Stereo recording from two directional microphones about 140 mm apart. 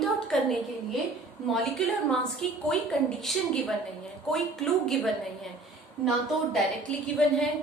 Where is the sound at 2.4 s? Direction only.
5° left (ahead or behind).